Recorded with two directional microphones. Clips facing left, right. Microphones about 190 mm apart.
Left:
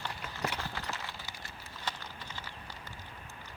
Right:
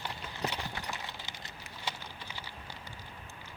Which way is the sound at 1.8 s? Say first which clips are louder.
Even; 10° right (ahead or behind).